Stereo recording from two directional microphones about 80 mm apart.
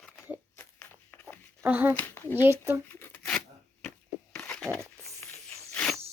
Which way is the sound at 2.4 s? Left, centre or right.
Right.